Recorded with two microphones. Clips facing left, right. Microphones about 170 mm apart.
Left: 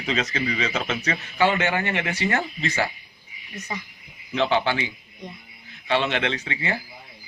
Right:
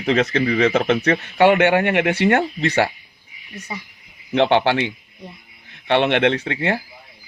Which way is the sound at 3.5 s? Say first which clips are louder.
Right 1 dB; 10° right (ahead or behind).